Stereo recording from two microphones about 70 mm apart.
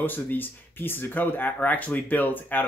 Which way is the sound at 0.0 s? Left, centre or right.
Left.